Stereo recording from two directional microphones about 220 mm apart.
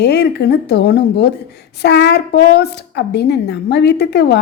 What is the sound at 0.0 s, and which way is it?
Speech, 50° left (ahead or behind).